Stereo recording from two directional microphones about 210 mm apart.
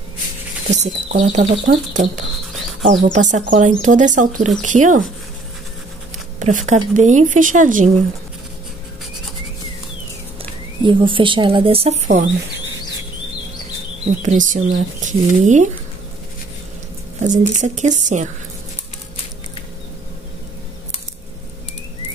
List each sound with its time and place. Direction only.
0.7 s speech: 35° right (ahead or behind)
6.4 s speech: 35° right (ahead or behind)
10.8 s speech: 25° right (ahead or behind)
14.2 s speech: 35° right (ahead or behind)
17.2 s speech: 35° right (ahead or behind)